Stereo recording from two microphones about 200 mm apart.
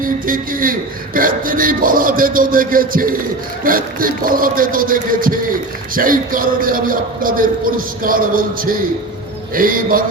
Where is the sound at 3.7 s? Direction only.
45° right (ahead or behind).